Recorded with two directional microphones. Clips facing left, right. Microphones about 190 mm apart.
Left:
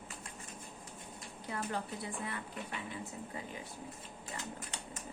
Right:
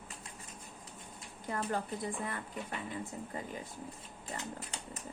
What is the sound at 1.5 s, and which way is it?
Speech, 45° right (ahead or behind).